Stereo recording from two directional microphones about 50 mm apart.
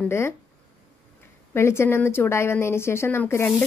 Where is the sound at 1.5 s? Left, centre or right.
Left.